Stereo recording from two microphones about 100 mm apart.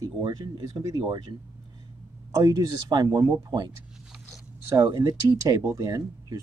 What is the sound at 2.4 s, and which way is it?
Speech, 35° right (ahead or behind).